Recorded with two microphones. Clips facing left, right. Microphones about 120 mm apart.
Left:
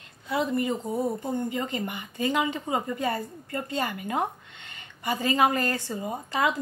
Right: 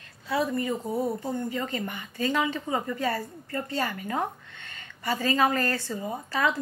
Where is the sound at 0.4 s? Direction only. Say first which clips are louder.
Left 1 dB; 20° left (ahead or behind).